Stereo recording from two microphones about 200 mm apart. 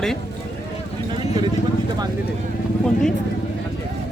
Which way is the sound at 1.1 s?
25° right (ahead or behind).